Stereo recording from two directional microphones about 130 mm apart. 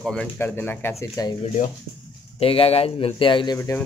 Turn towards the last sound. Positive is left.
turn(degrees=25)  # may be behind; listen again after turning